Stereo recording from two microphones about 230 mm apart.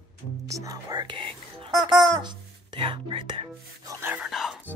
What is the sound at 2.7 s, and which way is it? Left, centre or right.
Music, right.